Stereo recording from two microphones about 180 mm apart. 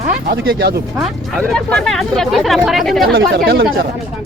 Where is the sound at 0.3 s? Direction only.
60° right (ahead or behind).